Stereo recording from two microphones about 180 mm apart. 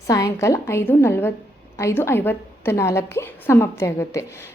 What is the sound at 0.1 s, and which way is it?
A woman's voice, 20° left (ahead or behind).